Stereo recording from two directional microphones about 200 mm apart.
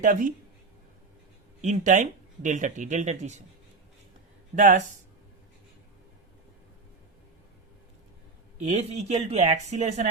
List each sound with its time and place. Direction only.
0.0 s speech: 40° right (ahead or behind)
1.6 s speech: 40° right (ahead or behind)
4.5 s speech: 35° right (ahead or behind)
8.7 s speech: 35° right (ahead or behind)